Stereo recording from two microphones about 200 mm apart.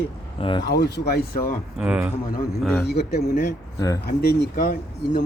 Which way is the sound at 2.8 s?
55° left (ahead or behind).